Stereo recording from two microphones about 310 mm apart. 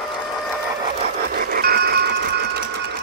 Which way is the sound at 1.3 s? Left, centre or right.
Right.